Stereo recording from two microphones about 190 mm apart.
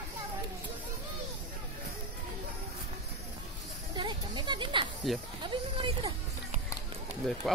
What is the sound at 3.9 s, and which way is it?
Children playing, 25° right (ahead or behind).